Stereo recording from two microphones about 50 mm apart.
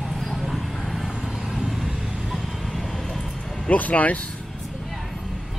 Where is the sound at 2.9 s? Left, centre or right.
Centre.